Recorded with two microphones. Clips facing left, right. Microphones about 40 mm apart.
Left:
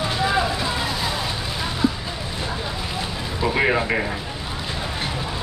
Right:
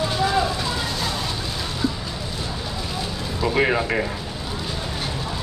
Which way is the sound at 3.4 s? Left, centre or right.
Centre.